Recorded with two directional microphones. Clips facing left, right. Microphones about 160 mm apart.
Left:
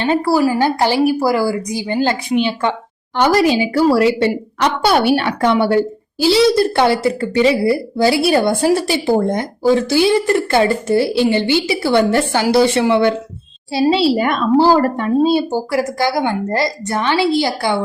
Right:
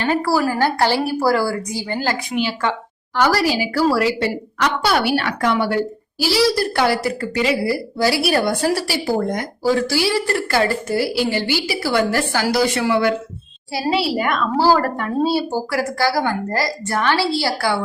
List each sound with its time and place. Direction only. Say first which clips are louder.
0.0 s a woman's voice: left 4 dB; 20° left (ahead or behind)